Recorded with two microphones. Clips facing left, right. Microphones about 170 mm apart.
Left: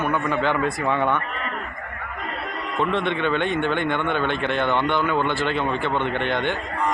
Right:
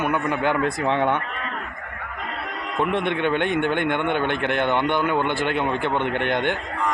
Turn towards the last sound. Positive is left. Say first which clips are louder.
# right 1 dB
turn(degrees=-15)  # may be behind; listen again after turning